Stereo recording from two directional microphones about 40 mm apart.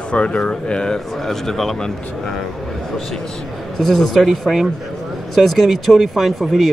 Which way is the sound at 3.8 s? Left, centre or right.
Centre.